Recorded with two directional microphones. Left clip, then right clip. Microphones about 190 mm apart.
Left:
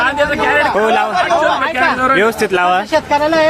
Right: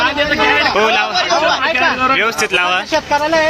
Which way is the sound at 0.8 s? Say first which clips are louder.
Even; 30° left (ahead or behind).